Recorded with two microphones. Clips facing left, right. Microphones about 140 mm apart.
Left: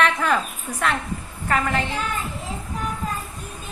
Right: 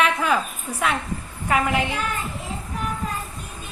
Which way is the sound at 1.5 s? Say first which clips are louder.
Right 1 dB; 15° right (ahead or behind).